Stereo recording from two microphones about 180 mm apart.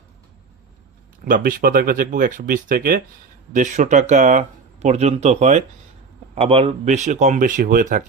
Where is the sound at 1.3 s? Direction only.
50° right (ahead or behind).